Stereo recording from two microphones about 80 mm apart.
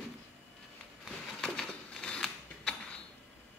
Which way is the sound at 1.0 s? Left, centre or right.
Centre.